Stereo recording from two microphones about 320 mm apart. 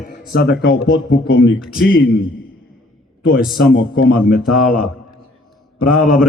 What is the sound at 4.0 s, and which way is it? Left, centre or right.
Speech, left.